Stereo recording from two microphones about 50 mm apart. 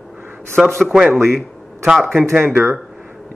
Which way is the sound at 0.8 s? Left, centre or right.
Centre.